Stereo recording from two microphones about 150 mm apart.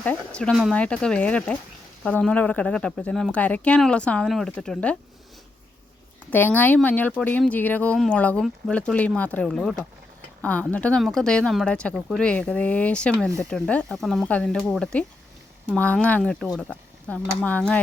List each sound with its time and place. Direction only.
0.0 s speech: 10° left (ahead or behind)
0.5 s speech: 5° right (ahead or behind)
0.8 s speech: 5° left (ahead or behind)
6.3 s speech: 10° left (ahead or behind)